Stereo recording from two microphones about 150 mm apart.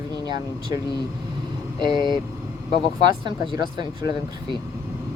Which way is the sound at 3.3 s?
30° right (ahead or behind).